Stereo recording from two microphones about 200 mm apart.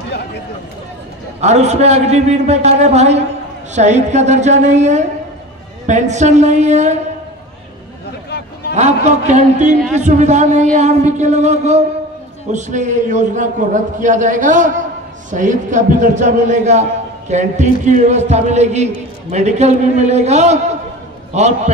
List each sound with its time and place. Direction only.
1.4 s speech: 35° right (ahead or behind)
8.3 s a sound: 55° left (ahead or behind)
8.7 s speech: 35° right (ahead or behind)